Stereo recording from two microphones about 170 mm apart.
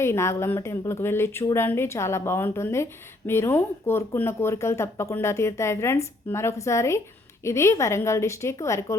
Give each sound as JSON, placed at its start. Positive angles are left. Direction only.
{"t": 0.0, "sound": "speech", "side_deg": 15}